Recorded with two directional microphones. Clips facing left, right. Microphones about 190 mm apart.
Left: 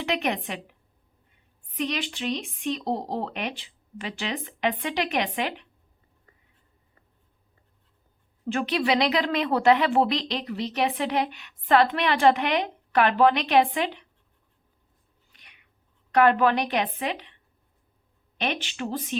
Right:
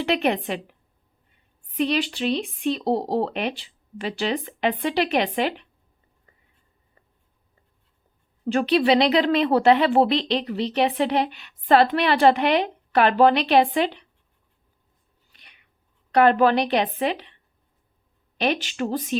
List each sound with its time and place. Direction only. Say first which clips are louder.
0.0 s speech: right 5 dB; 35° right (ahead or behind)
1.8 s speech: right 6 dB; 35° right (ahead or behind)
8.4 s speech: right 6 dB; 35° right (ahead or behind)
16.1 s speech: right 3 dB; 30° right (ahead or behind)
18.3 s speech: right 6 dB; 40° right (ahead or behind)